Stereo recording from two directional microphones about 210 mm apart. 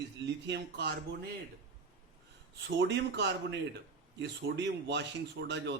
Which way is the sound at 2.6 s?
60° right (ahead or behind).